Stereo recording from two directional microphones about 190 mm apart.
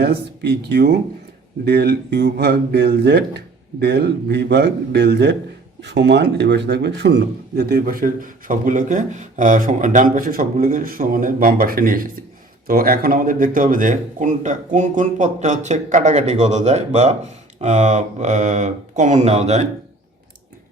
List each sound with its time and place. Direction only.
0.0 s a man's voice: 60° right (ahead or behind); by 19.6 s 35° right (ahead or behind)